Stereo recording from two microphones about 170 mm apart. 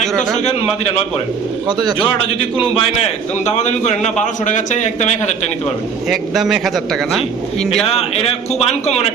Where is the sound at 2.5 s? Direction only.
35° left (ahead or behind).